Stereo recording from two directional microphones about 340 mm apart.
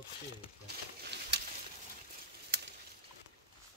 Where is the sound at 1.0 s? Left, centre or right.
Right.